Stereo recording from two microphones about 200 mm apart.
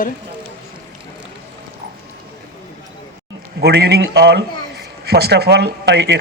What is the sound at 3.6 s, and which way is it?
Speech, 55° right (ahead or behind).